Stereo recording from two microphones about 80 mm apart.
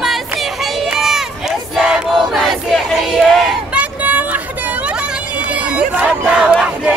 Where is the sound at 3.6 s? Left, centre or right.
Centre.